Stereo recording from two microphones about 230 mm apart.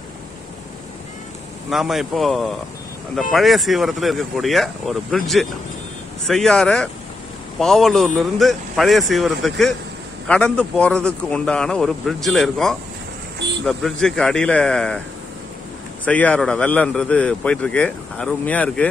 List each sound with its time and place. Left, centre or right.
1.7 s a man's voice: centre
16.1 s a man's voice: centre